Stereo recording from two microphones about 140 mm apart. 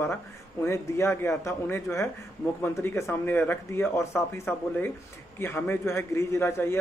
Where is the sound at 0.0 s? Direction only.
20° left (ahead or behind).